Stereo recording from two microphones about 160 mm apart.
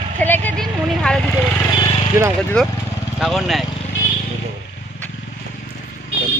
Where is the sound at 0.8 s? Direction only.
5° left (ahead or behind).